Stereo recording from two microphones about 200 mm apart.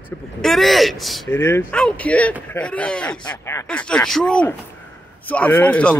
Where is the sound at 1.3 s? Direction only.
10° left (ahead or behind).